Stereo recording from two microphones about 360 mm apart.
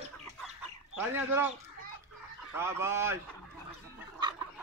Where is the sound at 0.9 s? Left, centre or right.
Centre.